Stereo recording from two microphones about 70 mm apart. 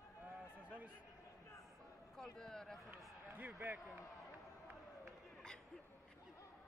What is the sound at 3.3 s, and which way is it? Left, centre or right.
Speech, right.